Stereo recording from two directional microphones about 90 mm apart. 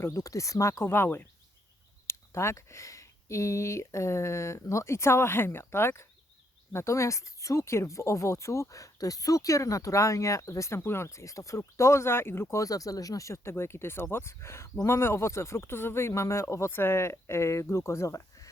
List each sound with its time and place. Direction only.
0.0 s speech: 35° left (ahead or behind)